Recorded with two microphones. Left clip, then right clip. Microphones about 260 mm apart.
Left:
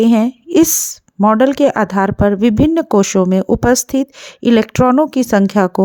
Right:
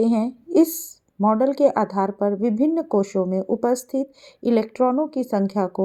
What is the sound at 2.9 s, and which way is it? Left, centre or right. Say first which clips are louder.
Speech: left 8 dB; left.